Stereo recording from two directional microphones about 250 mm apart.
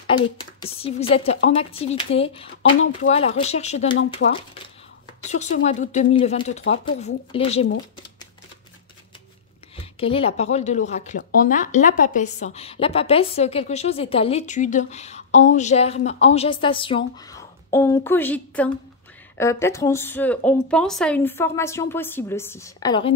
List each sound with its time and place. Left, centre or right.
0.1 s speech: centre
9.9 s speech: left